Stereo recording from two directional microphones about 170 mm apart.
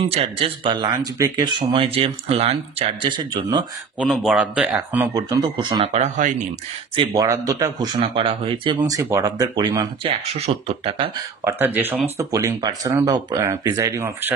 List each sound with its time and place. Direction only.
0.1 s speech: 35° right (ahead or behind)
4.0 s speech: 5° right (ahead or behind)
5.1 s speech: 25° right (ahead or behind)
5.9 s speech: 45° right (ahead or behind)
7.0 s speech: 20° right (ahead or behind)
10.0 s speech: 35° right (ahead or behind)
11.4 s speech: 10° right (ahead or behind)